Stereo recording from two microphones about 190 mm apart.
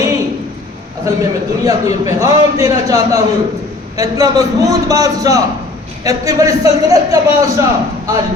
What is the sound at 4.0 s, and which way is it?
A man's voice, 15° right (ahead or behind).